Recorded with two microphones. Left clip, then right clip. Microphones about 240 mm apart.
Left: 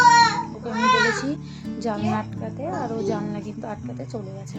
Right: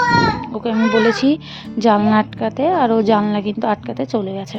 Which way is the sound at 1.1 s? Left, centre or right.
Right.